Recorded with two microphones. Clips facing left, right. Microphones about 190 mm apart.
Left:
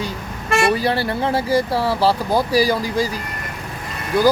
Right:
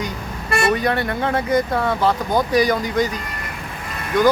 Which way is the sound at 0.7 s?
30° left (ahead or behind).